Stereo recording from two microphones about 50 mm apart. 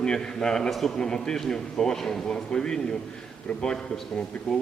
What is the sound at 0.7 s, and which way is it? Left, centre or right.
Speech, centre.